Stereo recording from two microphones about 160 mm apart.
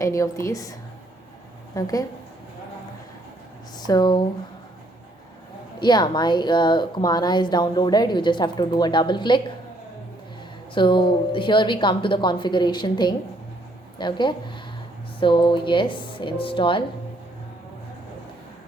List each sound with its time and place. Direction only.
0.0 s a woman's voice: 20° left (ahead or behind)
3.8 s speech: 25° left (ahead or behind)
5.8 s a woman's voice: 25° left (ahead or behind)
10.8 s a woman's voice: 30° left (ahead or behind)